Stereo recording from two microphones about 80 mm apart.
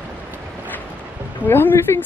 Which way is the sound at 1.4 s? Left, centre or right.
Left.